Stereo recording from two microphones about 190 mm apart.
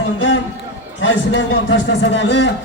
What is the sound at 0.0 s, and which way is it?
A man's voice, 70° left (ahead or behind).